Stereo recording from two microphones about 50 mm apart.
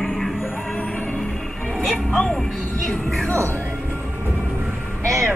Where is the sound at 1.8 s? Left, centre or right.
Centre.